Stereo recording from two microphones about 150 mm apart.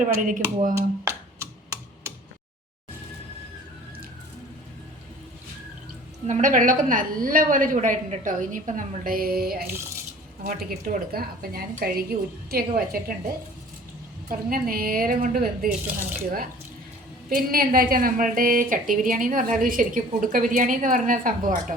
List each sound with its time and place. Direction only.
0.2 s a woman's voice: 65° right (ahead or behind)
0.8 s a sound: 20° right (ahead or behind)
6.2 s a woman's voice: 55° right (ahead or behind); by 12.0 s 80° right
12.5 s a woman's voice: 90° right
14.3 s a woman's voice: 75° right (ahead or behind)